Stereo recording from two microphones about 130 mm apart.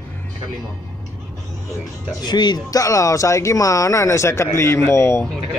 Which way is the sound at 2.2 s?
35° left (ahead or behind).